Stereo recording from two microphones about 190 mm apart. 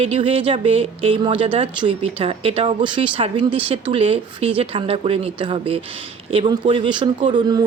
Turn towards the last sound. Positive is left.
turn(degrees=-20)  # may be behind; listen again after turning